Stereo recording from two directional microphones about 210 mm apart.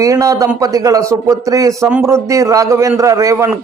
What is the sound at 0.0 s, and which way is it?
A man's voice, 15° right (ahead or behind).